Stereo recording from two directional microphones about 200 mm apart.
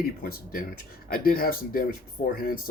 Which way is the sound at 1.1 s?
45° left (ahead or behind).